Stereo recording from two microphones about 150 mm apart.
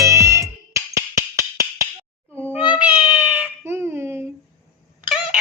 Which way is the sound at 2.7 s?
10° right (ahead or behind).